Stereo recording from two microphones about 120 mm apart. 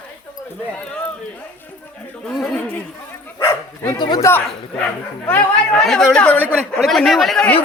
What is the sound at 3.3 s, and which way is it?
Dog, 35° left (ahead or behind).